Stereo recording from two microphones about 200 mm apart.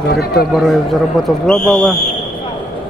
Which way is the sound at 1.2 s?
Centre (ahead or behind).